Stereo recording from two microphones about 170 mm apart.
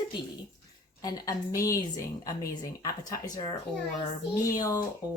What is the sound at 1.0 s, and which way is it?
Speech, 20° left (ahead or behind).